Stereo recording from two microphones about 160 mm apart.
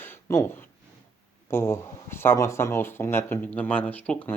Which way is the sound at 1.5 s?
15° left (ahead or behind).